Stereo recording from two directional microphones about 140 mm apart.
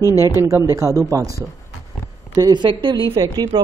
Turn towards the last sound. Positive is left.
turn(degrees=-25)  # may be behind; listen again after turning